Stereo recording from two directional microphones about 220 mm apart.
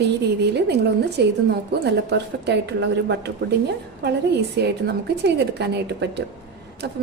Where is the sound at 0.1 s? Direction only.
50° right (ahead or behind).